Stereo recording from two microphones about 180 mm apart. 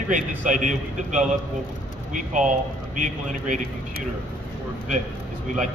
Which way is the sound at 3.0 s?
45° right (ahead or behind).